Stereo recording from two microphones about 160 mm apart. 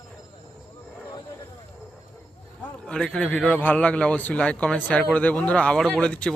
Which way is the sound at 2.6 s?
5° left (ahead or behind).